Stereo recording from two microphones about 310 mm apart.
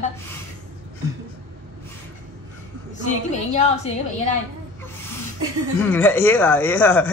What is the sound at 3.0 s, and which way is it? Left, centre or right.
Speech, left.